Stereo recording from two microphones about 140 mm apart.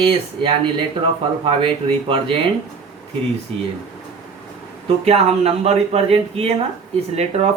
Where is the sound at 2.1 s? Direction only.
40° right (ahead or behind).